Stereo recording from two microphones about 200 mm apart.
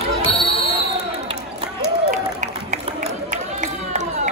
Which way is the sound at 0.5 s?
30° right (ahead or behind).